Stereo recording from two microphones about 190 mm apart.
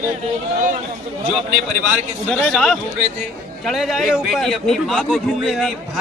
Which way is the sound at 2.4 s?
Centre (ahead or behind).